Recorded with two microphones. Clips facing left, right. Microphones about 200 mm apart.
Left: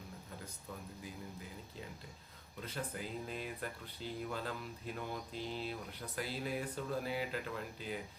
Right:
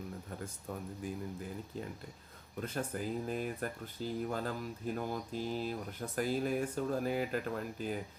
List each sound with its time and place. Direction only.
2.6 s speech: 50° right (ahead or behind)